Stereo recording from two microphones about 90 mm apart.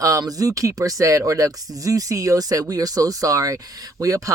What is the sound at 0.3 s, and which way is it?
Speech, 40° right (ahead or behind).